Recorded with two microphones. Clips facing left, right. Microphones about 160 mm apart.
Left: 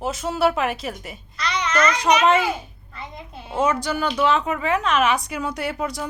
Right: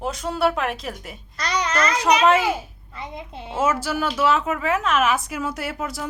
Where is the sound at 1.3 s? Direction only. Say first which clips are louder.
Even; 40° right (ahead or behind).